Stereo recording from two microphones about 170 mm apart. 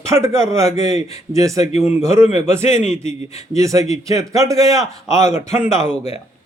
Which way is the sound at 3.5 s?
20° right (ahead or behind).